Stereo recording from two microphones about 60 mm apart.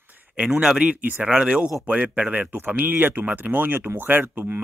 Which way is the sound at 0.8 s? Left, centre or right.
Right.